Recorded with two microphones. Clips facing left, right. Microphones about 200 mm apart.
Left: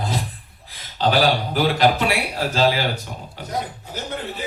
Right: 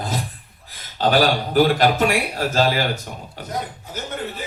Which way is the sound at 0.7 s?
45° right (ahead or behind).